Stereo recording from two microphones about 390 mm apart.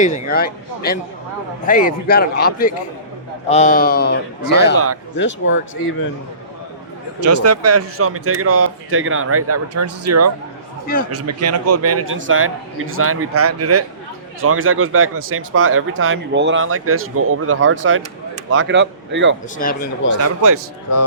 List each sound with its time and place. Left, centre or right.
0.0 s a man's voice: left
7.2 s speech: right
19.5 s a man's voice: left
20.2 s speech: right